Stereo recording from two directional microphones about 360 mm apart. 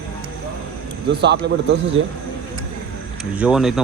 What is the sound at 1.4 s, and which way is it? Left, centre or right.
Speech, right.